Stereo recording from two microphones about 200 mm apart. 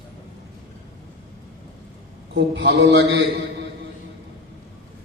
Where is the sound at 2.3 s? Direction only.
60° right (ahead or behind).